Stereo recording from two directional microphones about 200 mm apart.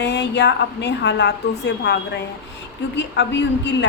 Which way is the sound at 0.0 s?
60° left (ahead or behind).